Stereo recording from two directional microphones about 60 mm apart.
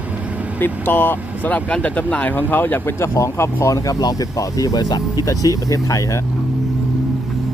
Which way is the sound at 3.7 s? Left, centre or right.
Left.